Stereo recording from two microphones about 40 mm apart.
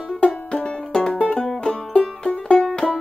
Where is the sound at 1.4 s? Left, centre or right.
Centre.